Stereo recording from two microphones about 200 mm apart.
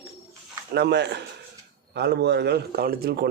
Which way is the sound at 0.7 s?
55° right (ahead or behind).